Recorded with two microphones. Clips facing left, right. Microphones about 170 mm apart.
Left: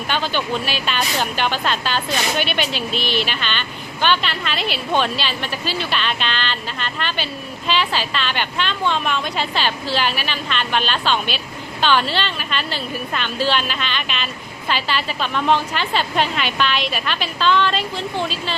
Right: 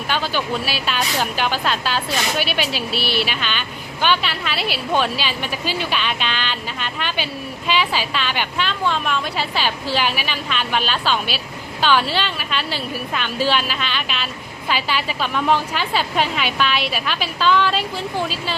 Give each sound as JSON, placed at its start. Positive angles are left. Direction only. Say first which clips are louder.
{"t": 0.1, "sound": "a woman's voice", "louder": "even", "side_deg": -5}